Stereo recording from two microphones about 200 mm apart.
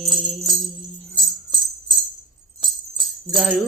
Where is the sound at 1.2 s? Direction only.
20° right (ahead or behind).